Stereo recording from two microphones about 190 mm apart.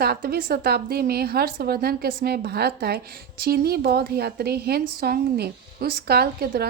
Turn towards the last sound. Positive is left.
turn(degrees=-55)  # may be behind; listen again after turning